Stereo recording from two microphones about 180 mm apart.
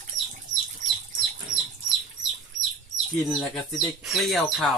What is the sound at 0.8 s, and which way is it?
Bird, 45° right (ahead or behind).